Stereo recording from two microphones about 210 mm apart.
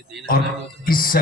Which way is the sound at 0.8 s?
45° left (ahead or behind).